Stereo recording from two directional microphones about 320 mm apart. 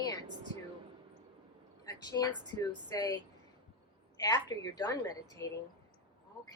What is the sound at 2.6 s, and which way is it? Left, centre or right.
Speech, centre.